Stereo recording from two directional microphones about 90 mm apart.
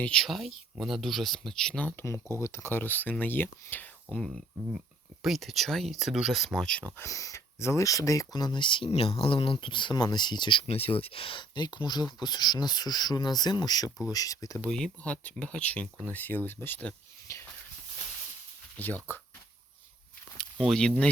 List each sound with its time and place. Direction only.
0.0 s speech: 5° left (ahead or behind)
2.0 s speech: 25° left (ahead or behind)
5.2 s speech: centre (ahead or behind)
6.7 s speech: 15° left (ahead or behind)
7.0 s speech: 35° left (ahead or behind)
14.7 s speech: 10° left (ahead or behind)
17.3 s a sound: 35° left (ahead or behind)
18.8 s speech: 20° left (ahead or behind)
20.6 s speech: 5° left (ahead or behind)